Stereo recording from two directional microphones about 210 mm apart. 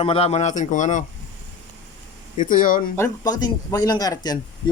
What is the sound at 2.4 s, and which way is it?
Speech, 40° left (ahead or behind).